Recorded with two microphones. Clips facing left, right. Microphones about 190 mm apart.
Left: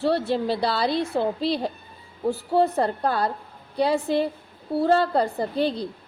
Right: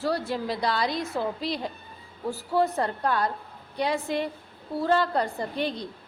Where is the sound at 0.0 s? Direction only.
30° left (ahead or behind).